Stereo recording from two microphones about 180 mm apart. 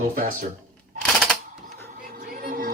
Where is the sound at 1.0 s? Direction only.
5° left (ahead or behind).